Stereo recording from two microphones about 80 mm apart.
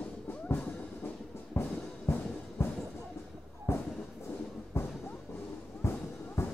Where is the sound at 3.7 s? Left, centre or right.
Left.